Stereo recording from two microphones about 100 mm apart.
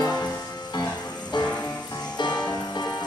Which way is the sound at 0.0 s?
40° left (ahead or behind).